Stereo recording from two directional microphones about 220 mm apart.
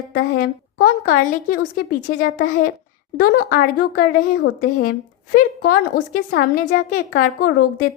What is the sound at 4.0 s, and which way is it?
A woman's voice, 40° left (ahead or behind).